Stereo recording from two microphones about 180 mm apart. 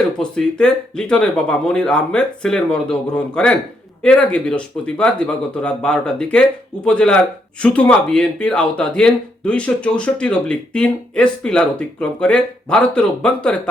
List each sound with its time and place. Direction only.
0.2 s speech: 5° left (ahead or behind)